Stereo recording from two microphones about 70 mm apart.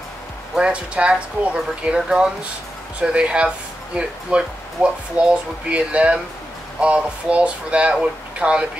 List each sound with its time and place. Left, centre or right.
0.6 s speech: centre